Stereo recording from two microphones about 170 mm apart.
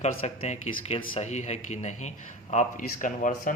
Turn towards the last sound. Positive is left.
turn(degrees=50)  # may be behind; listen again after turning